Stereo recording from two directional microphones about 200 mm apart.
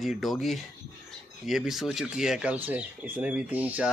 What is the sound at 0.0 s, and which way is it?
Speech, centre (ahead or behind).